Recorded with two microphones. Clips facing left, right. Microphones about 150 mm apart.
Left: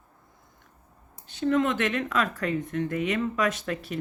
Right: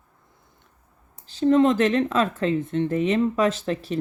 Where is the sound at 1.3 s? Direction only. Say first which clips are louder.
Right 6 dB; 30° right (ahead or behind).